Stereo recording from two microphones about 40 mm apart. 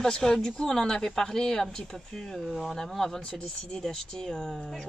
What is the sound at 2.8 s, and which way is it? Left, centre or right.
Speech, centre.